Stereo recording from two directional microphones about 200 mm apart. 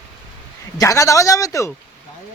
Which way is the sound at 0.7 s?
15° left (ahead or behind).